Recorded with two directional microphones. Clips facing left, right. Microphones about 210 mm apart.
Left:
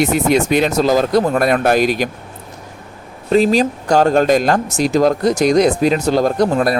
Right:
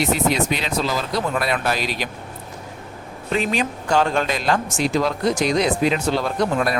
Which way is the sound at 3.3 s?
35° left (ahead or behind).